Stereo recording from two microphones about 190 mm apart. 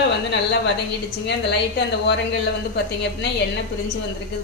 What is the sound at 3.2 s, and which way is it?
Speech, 65° left (ahead or behind).